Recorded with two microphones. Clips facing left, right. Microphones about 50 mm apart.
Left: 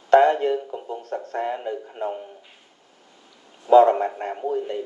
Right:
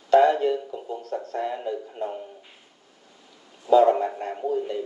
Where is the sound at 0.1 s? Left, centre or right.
Left.